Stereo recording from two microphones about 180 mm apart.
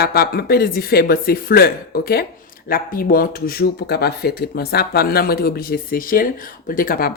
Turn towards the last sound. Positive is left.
turn(degrees=50)  # may be behind; listen again after turning